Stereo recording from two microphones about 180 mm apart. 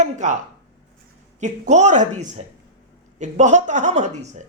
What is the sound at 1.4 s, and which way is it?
A man's voice, 40° right (ahead or behind).